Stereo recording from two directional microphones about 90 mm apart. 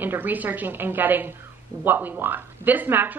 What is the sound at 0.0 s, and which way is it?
Speech, 20° right (ahead or behind).